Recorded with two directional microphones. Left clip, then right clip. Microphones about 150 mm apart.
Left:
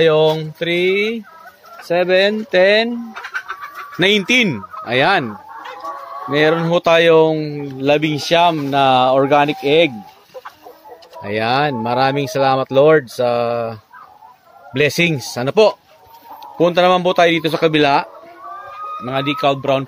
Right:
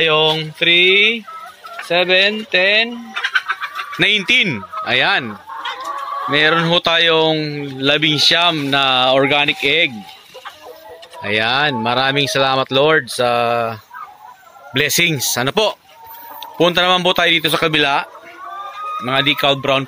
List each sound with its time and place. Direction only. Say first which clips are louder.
0.0 s mantra: left 1 dB; 45° left (ahead or behind)
1.9 s speech: even; 65° left (ahead or behind)
4.0 s speech: even; 30° left (ahead or behind)
4.3 s speech: right 1 dB; 15° left (ahead or behind)
6.2 s speech: right 1 dB; 20° left (ahead or behind)
11.1 s speech: right 1 dB; 15° left (ahead or behind)
19.0 s speech: right 2 dB; centre (ahead or behind)